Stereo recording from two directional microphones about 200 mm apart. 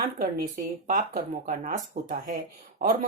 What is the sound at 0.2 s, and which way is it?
Speech, 45° right (ahead or behind).